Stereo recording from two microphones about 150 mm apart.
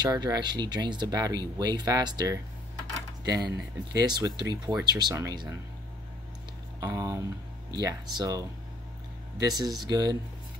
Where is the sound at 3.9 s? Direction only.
25° right (ahead or behind).